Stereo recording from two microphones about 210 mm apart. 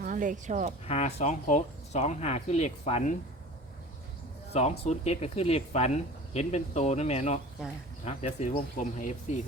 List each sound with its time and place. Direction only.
0.0 s speech: 40° right (ahead or behind)
0.9 s speech: 30° left (ahead or behind)
4.5 s speech: 30° left (ahead or behind)